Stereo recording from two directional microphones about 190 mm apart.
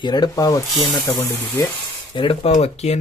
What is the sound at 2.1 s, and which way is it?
Speech, 30° left (ahead or behind).